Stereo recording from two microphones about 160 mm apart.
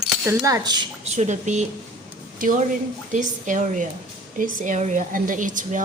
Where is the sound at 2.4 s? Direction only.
60° right (ahead or behind).